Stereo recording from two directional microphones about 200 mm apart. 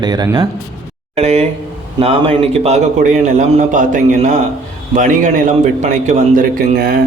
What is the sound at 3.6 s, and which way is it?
A man's voice, 40° right (ahead or behind).